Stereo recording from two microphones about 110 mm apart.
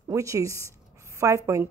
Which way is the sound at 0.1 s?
30° right (ahead or behind).